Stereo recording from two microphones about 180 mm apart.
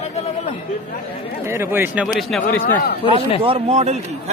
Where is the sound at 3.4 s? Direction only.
35° right (ahead or behind).